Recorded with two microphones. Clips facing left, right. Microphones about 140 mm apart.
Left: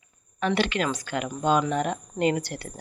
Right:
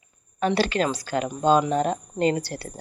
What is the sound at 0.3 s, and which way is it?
Speech, 35° right (ahead or behind).